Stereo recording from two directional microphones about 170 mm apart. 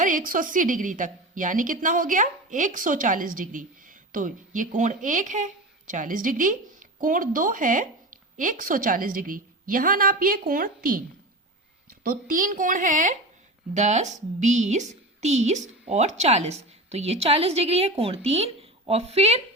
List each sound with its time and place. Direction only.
0.0 s a woman's voice: 50° right (ahead or behind)